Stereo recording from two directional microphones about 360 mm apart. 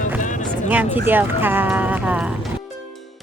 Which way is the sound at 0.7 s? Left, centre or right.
Centre.